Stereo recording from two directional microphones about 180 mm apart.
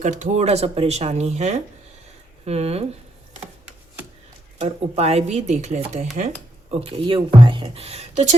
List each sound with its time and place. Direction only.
0.0 s speech: 40° right (ahead or behind)
4.6 s speech: 35° right (ahead or behind)